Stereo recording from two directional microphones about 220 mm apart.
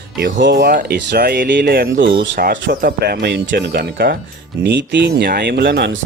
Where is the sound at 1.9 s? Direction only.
55° right (ahead or behind).